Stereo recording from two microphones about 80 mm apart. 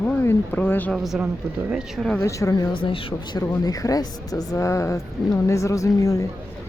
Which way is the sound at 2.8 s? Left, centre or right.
Left.